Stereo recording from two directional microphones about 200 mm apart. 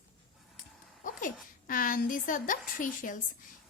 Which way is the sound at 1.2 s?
45° left (ahead or behind).